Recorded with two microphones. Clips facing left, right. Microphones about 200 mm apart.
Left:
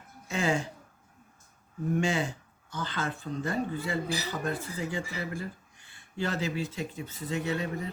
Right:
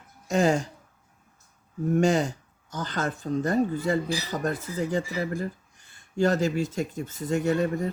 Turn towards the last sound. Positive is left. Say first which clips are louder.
# right 7 dB
turn(degrees=-45)  # may be behind; listen again after turning